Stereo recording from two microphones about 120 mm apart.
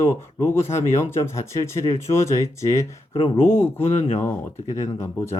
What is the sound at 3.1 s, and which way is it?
Speech, 50° left (ahead or behind).